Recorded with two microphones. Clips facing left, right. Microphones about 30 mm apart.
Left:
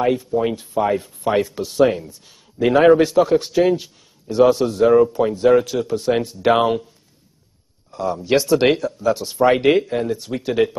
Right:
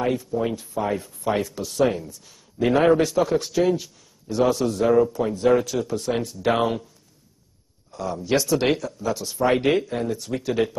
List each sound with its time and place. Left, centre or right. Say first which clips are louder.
0.0 s speech: left 5 dB; centre
7.9 s speech: left 5 dB; centre